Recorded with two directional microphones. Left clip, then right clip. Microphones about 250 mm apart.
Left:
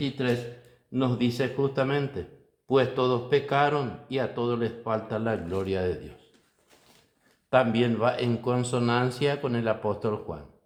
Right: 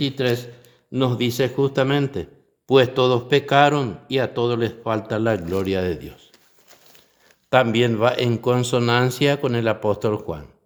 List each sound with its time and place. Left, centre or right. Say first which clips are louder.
0.0 s a man's voice: right 6 dB; right
7.5 s a man's voice: right 6 dB; right